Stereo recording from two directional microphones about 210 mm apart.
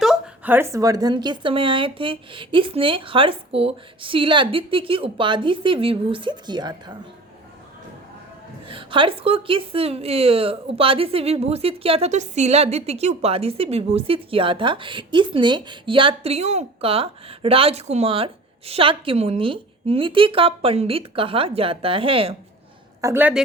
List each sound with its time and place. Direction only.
0.0 s a woman's voice: 5° right (ahead or behind); by 6.9 s 20° right (ahead or behind)
8.6 s a woman's voice: 25° right (ahead or behind)
23.0 s a woman's voice: 10° right (ahead or behind)